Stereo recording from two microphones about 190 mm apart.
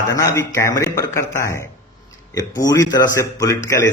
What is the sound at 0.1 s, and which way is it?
A man's voice, 15° left (ahead or behind).